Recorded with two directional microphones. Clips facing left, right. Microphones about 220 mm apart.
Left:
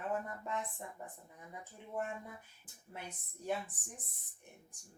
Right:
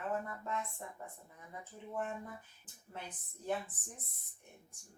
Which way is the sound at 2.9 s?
10° left (ahead or behind).